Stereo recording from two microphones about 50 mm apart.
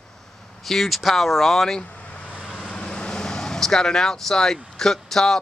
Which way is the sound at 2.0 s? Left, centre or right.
Left.